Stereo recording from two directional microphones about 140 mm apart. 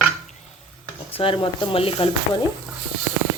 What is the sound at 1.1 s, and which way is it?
Speech, 40° left (ahead or behind).